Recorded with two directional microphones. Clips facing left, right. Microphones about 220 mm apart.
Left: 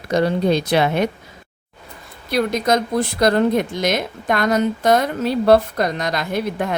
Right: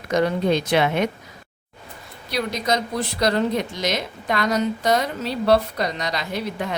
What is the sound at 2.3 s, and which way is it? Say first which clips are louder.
Speech: left 5 dB; 50° left (ahead or behind).